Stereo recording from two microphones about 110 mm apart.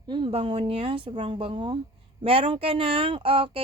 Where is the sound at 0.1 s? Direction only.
55° right (ahead or behind).